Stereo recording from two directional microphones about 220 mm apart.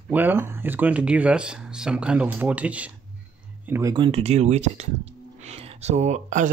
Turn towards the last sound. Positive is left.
turn(degrees=-35)  # may be behind; listen again after turning